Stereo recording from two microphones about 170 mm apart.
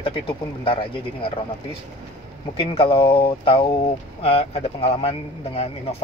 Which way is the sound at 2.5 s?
35° left (ahead or behind).